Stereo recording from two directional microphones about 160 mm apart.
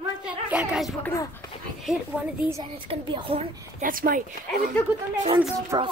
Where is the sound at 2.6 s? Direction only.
30° right (ahead or behind).